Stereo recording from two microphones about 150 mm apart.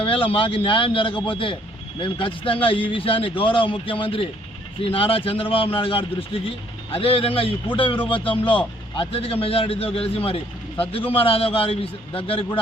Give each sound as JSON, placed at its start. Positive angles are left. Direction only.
{"t": 0.0, "sound": "a man's voice", "side_deg": 35}